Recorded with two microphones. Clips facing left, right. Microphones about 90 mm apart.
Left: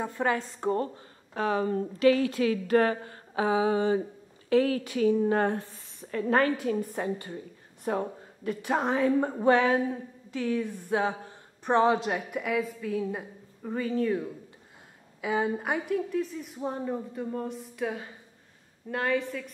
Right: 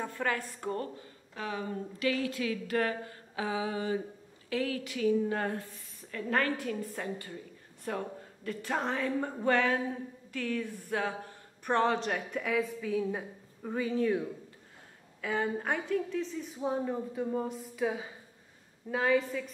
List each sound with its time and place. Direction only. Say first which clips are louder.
0.0 s speech: left 5 dB; 20° left (ahead or behind)
1.3 s speech: left 9 dB; 50° left (ahead or behind); by 6.4 s 30° left (ahead or behind)
6.6 s a woman's voice: left 6 dB; 20° left (ahead or behind); by 14.3 s centre (ahead or behind)
15.2 s a woman's voice: left 4 dB; 15° left (ahead or behind); by 19.5 s centre (ahead or behind)